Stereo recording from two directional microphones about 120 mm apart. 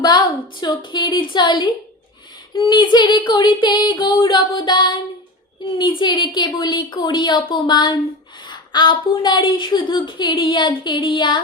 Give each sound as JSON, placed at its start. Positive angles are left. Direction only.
{"t": 0.0, "sound": "a woman's voice", "side_deg": 35}